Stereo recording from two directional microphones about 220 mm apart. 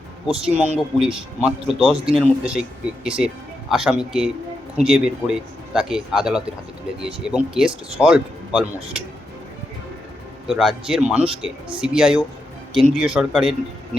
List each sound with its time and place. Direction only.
0.5 s speech: 30° right (ahead or behind)
0.9 s speech: 5° right (ahead or behind)
10.5 s speech: centre (ahead or behind)